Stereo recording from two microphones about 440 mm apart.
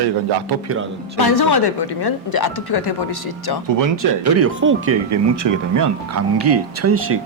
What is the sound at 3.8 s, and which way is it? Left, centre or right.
Speech, right.